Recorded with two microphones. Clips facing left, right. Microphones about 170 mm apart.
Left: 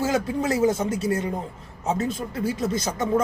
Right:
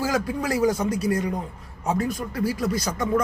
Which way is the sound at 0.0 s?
25° left (ahead or behind).